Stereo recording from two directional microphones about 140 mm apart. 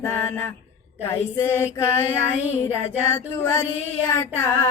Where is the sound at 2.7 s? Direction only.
15° left (ahead or behind).